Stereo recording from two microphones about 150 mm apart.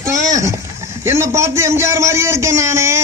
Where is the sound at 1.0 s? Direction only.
15° right (ahead or behind).